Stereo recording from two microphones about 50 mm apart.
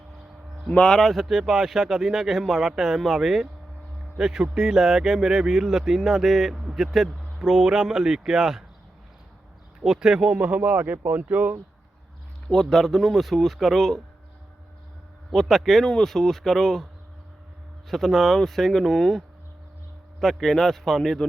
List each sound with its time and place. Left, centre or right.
0.7 s speech: centre
1.1 s speech: centre
9.8 s speech: centre
10.3 s speech: right
12.7 s speech: centre
15.3 s speech: centre
17.8 s speech: centre